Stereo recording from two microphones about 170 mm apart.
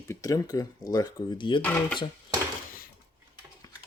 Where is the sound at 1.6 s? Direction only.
10° left (ahead or behind).